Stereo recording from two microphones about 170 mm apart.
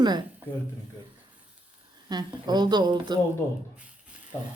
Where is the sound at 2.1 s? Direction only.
25° right (ahead or behind).